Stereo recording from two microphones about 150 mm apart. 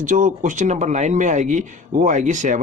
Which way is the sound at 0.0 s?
55° right (ahead or behind).